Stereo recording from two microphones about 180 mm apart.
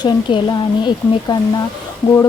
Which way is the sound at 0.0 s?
25° left (ahead or behind).